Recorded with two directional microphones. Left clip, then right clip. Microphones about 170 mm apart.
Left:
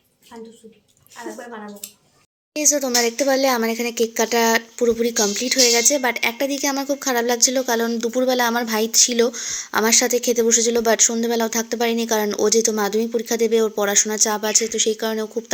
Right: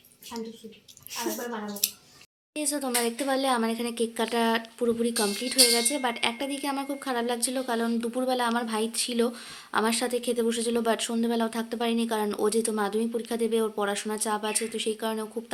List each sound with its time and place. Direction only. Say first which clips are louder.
1.1 s a woman's voice: right 1 dB; 10° left (ahead or behind)
2.6 s speech: left 10 dB; 20° left (ahead or behind)